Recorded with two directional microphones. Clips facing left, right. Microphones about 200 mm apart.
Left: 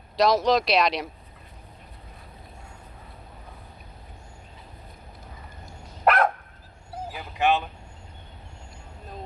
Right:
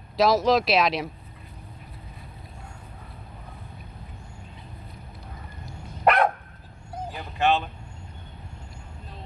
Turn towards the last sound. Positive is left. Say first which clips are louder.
# even
turn(degrees=15)  # may be behind; listen again after turning